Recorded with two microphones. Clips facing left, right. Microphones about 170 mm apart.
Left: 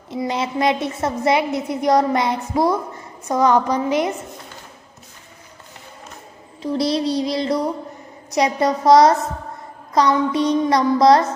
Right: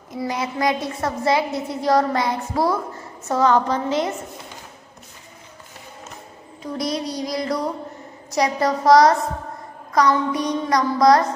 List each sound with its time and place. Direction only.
0.1 s a woman's voice: 25° left (ahead or behind)
6.6 s a woman's voice: 30° left (ahead or behind)